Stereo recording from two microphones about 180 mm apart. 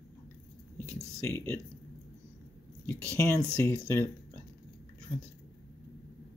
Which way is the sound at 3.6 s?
15° left (ahead or behind).